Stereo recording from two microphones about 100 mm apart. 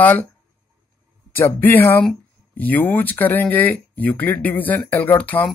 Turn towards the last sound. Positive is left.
turn(degrees=15)  # may be behind; listen again after turning